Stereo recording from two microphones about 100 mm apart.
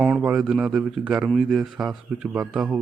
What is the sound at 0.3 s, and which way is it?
Speech, 10° right (ahead or behind).